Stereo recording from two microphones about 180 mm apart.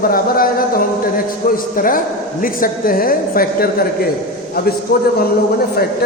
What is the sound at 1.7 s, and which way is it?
A man's voice, 50° left (ahead or behind).